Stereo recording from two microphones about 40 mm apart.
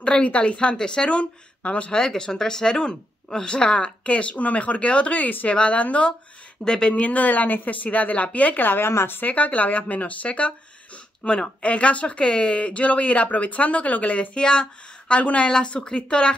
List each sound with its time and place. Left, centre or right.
0.0 s speech: left
1.9 s speech: centre; by 5.5 s left
5.5 s speech: left
6.6 s speech: left
7.1 s speech: left
8.6 s a woman's voice: left
9.2 s speech: left
11.2 s speech: left
11.6 s speech: left
14.3 s speech: left